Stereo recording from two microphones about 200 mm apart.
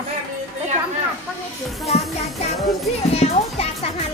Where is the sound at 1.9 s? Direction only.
35° left (ahead or behind).